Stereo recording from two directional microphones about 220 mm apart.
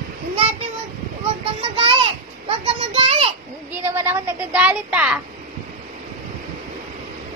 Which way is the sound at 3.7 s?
10° right (ahead or behind).